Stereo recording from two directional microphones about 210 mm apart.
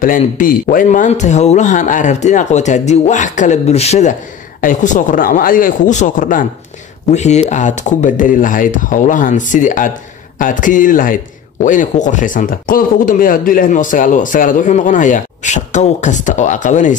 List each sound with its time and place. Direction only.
0.2 s speech: 40° left (ahead or behind)